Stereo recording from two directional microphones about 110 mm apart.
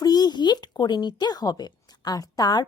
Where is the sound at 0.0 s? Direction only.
40° left (ahead or behind).